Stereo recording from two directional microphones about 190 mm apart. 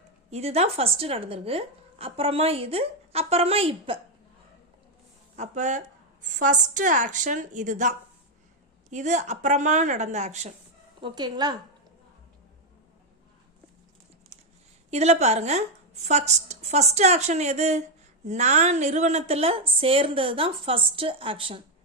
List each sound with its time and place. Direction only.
0.3 s speech: 35° right (ahead or behind)
5.4 s speech: 40° right (ahead or behind)
11.0 s a woman's voice: 20° right (ahead or behind)
14.8 s a woman's voice: 35° right (ahead or behind)